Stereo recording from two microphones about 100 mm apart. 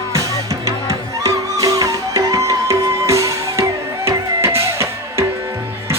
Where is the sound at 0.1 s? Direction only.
35° right (ahead or behind).